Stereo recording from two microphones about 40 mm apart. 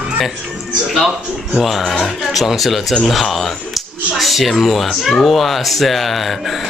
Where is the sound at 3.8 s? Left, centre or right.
Centre.